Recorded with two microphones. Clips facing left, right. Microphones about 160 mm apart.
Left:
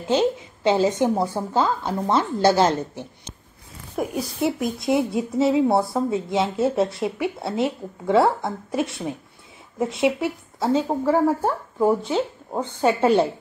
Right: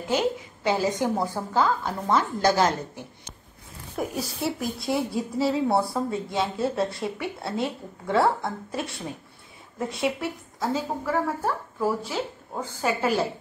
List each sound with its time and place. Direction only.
0.1 s a woman's voice: 20° left (ahead or behind)
3.9 s speech: 10° left (ahead or behind)
4.7 s a woman's voice: 20° left (ahead or behind)